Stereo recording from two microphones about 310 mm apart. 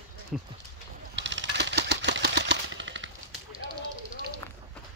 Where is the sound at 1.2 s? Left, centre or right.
Right.